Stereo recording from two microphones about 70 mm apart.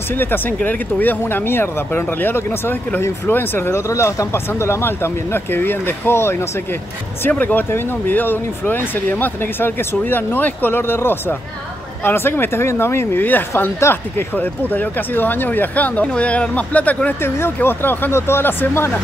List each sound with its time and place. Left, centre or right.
0.1 s speech: left
7.2 s speech: left